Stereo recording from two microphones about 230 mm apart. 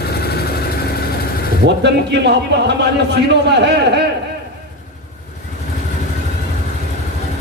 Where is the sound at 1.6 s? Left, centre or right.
Right.